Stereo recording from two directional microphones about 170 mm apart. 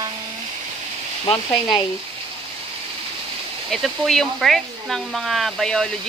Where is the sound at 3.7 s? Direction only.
Centre (ahead or behind).